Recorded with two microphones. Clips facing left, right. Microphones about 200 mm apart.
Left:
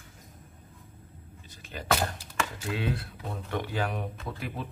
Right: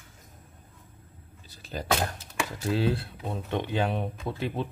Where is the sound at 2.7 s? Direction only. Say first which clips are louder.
Right 9 dB; 30° right (ahead or behind).